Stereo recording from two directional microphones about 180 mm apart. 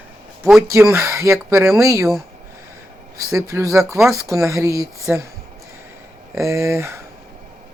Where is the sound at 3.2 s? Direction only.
20° right (ahead or behind).